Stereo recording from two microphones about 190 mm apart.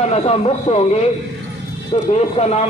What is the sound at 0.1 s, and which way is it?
Speech, 35° left (ahead or behind).